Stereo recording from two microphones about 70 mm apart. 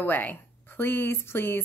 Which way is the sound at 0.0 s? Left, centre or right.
Left.